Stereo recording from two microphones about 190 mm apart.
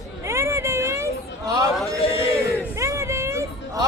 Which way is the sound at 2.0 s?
30° left (ahead or behind).